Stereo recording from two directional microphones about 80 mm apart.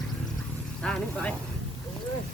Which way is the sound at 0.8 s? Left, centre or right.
Centre.